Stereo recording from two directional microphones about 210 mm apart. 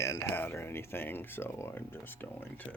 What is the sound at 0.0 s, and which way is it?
Speech, 15° left (ahead or behind).